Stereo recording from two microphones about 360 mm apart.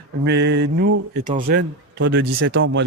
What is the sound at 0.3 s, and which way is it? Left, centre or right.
Speech, right.